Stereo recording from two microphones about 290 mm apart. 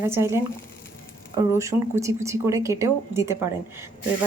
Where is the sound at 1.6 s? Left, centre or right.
Centre.